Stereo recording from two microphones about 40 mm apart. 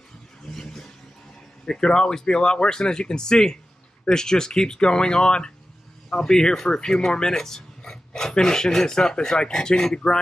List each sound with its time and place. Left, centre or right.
0.6 s vehicle: centre
1.7 s speech: centre